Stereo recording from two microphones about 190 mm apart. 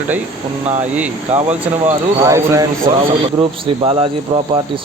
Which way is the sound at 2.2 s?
15° right (ahead or behind).